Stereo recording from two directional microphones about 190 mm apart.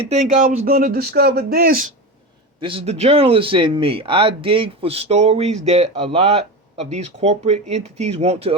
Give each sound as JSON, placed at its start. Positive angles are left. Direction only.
{"t": 0.0, "sound": "speech", "side_deg": -35}
{"t": 0.4, "sound": "speech", "side_deg": -50}
{"t": 2.6, "sound": "speech", "side_deg": -30}